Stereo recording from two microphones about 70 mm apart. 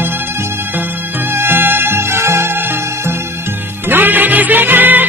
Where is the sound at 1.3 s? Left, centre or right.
Right.